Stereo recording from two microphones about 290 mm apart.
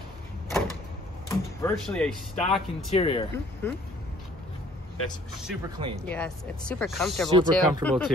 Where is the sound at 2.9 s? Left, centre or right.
Centre.